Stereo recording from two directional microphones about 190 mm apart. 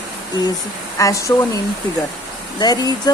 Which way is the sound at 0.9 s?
15° left (ahead or behind).